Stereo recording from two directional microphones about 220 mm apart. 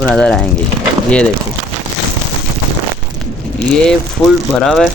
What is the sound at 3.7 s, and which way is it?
Speech, 5° left (ahead or behind).